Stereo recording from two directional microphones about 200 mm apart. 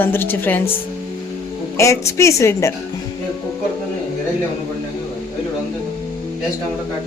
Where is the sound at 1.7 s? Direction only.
15° left (ahead or behind).